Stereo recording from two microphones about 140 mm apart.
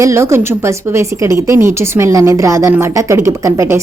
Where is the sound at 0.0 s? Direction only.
20° right (ahead or behind).